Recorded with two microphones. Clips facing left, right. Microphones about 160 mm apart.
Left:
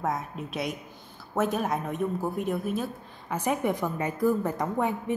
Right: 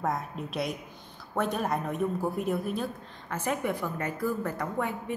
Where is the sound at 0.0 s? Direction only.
Centre (ahead or behind).